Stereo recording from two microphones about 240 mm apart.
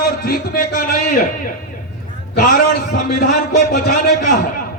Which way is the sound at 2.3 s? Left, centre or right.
Left.